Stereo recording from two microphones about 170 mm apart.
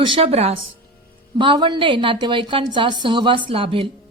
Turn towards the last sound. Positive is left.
turn(degrees=-30)  # may be behind; listen again after turning